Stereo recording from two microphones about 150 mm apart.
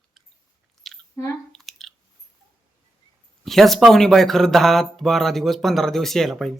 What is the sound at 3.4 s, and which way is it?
Speech, centre (ahead or behind).